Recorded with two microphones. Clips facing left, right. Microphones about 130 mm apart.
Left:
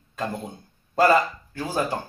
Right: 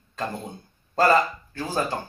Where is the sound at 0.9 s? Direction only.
10° left (ahead or behind).